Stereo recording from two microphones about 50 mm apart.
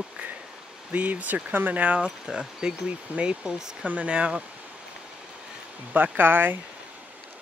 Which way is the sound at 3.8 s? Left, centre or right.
Right.